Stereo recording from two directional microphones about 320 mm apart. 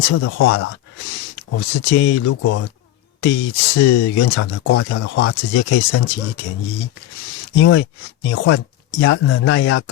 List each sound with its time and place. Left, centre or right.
0.0 s speech: left
4.4 s speech: left
7.5 s speech: left